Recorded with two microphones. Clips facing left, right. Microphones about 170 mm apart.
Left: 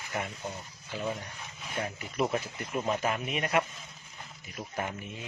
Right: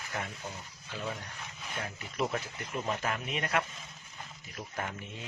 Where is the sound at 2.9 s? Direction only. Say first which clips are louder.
Left 4 dB; 20° left (ahead or behind).